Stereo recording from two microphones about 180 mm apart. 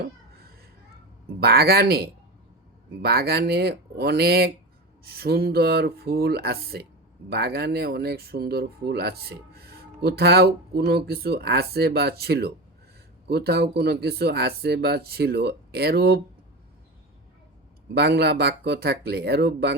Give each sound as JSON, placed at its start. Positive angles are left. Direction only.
{"t": 1.4, "sound": "speech", "side_deg": -60}
{"t": 17.9, "sound": "speech", "side_deg": -65}